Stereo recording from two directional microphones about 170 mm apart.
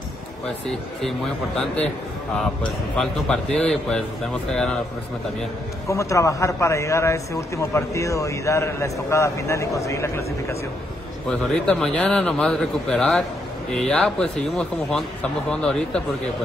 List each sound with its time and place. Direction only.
0.7 s a man's voice: centre (ahead or behind)
5.9 s a man's voice: 20° left (ahead or behind)
11.2 s a man's voice: 5° left (ahead or behind)